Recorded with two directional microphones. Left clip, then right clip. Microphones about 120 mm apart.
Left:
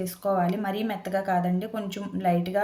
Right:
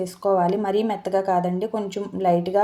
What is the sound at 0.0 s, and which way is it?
A woman's voice, 20° right (ahead or behind).